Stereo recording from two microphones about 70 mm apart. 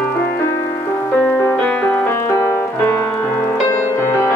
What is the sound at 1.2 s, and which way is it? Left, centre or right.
Music, left.